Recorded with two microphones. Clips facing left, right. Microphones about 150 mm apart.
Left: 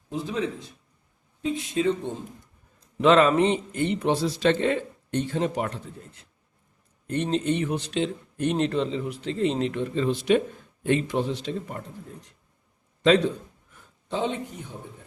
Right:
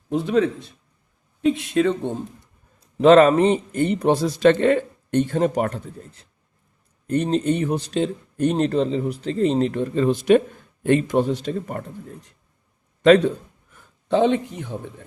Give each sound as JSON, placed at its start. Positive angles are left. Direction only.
{"t": 0.1, "sound": "a man's voice", "side_deg": -65}
{"t": 3.0, "sound": "a man's voice", "side_deg": -45}
{"t": 13.0, "sound": "a man's voice", "side_deg": -55}
{"t": 14.1, "sound": "speech", "side_deg": -75}